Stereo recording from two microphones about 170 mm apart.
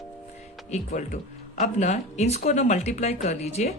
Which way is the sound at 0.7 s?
50° left (ahead or behind).